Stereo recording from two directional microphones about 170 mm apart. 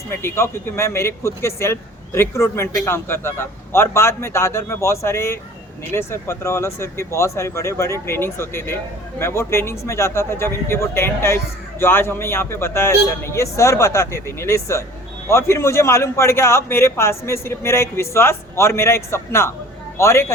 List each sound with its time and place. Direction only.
0.1 s speech: 15° left (ahead or behind)